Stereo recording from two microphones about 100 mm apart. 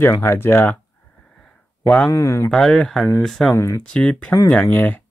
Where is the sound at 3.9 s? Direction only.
10° left (ahead or behind).